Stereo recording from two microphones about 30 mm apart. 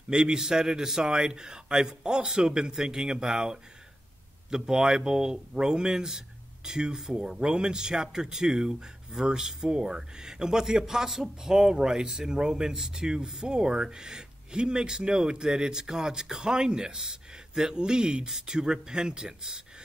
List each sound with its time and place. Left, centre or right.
0.3 s speech: centre